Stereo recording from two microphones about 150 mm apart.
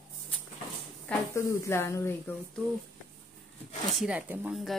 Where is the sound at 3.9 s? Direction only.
5° right (ahead or behind).